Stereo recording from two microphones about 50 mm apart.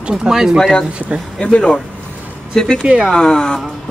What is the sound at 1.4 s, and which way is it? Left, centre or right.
Speech, centre.